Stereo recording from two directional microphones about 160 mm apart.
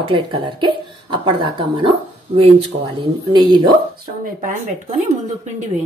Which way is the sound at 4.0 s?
55° right (ahead or behind).